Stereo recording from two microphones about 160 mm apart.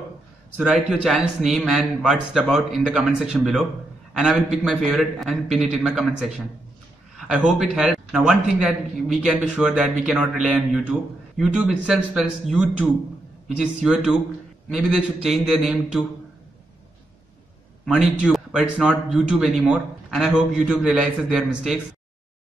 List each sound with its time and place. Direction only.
0.6 s a man's voice: 5° right (ahead or behind)
17.8 s a man's voice: 5° right (ahead or behind)